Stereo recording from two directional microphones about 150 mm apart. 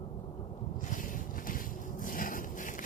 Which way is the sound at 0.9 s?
60° left (ahead or behind).